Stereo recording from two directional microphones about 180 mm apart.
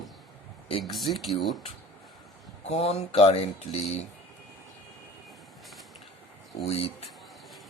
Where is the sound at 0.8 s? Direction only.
Centre (ahead or behind).